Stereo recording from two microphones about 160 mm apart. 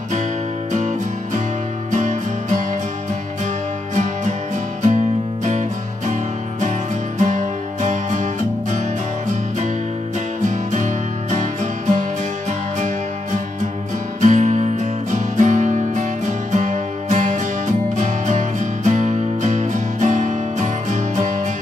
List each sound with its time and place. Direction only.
0.7 s music: 50° right (ahead or behind)
5.4 s music: 50° right (ahead or behind)
7.2 s music: 50° right (ahead or behind)
10.4 s music: 50° right (ahead or behind)
14.2 s music: 50° right (ahead or behind)